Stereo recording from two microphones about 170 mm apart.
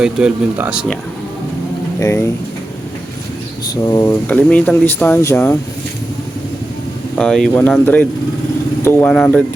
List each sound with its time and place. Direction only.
0.0 s speech: 5° right (ahead or behind)
2.0 s speech: 20° left (ahead or behind)
3.8 s speech: 20° left (ahead or behind)
7.2 s speech: 5° left (ahead or behind)